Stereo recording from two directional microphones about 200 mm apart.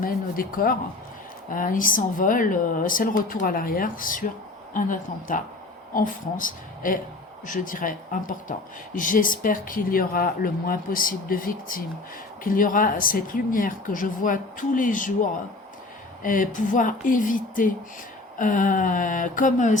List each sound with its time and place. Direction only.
0.0 s speech: 45° left (ahead or behind)